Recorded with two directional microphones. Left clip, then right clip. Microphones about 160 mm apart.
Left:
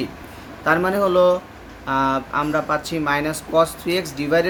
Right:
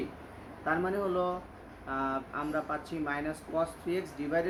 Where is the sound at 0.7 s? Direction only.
90° left.